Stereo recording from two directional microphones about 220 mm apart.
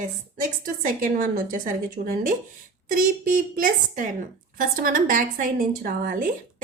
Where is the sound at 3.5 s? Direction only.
35° right (ahead or behind).